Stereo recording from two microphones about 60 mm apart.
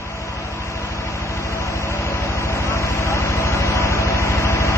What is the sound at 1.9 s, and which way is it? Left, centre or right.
Vehicle, left.